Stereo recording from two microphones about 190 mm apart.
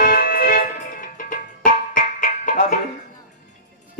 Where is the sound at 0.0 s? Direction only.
45° left (ahead or behind).